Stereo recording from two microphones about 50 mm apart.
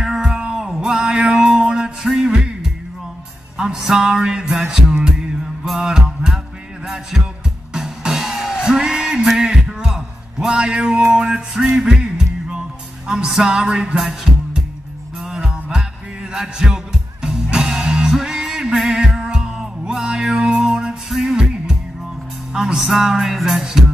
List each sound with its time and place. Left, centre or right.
0.0 s music: centre